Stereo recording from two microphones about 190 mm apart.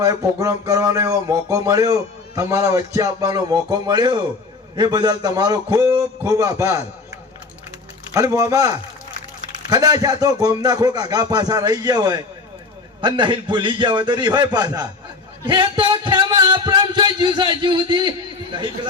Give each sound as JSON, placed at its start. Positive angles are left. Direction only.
{"t": 0.0, "sound": "music", "side_deg": -15}
{"t": 8.1, "sound": "music", "side_deg": -20}